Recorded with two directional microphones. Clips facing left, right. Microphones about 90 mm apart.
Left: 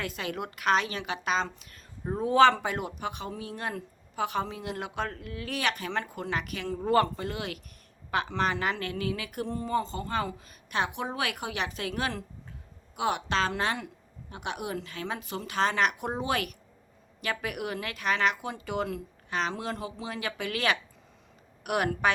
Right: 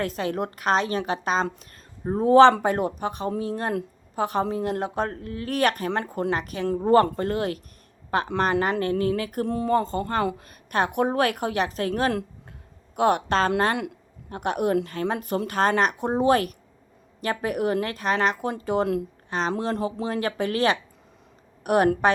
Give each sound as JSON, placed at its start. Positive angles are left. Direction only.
{"t": 0.0, "sound": "speech", "side_deg": -35}
{"t": 7.2, "sound": "a woman's voice", "side_deg": -45}
{"t": 9.5, "sound": "a woman's voice", "side_deg": -55}